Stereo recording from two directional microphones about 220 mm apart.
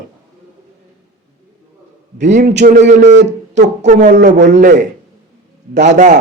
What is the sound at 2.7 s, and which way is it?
Speech, 35° right (ahead or behind).